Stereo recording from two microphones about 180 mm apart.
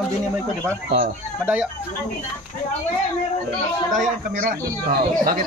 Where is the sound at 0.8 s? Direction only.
50° right (ahead or behind).